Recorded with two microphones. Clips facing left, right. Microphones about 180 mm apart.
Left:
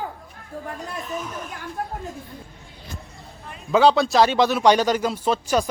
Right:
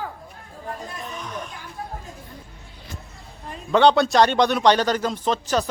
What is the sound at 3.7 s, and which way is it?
A man's voice, 5° left (ahead or behind).